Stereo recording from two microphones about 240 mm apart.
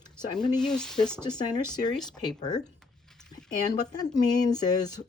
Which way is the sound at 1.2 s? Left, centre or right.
Centre.